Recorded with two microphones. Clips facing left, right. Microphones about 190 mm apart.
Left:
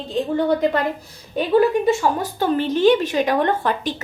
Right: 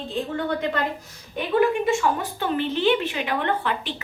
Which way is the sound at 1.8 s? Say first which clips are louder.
Left 4 dB; 40° left (ahead or behind).